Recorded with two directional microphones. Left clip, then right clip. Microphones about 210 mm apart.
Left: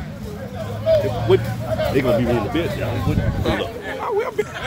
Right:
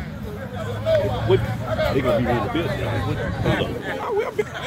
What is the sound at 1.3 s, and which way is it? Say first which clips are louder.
Speech: left 3 dB; 25° left (ahead or behind).